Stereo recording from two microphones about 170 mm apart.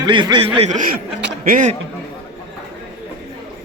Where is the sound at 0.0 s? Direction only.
25° right (ahead or behind); by 1.7 s 50° right (ahead or behind).